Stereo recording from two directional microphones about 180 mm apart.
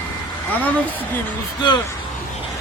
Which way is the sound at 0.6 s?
10° left (ahead or behind).